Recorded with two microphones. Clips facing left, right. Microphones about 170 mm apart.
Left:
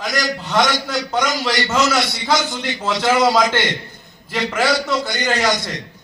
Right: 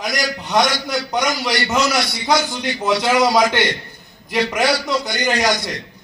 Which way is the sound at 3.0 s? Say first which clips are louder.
Left 1 dB; 15° right (ahead or behind).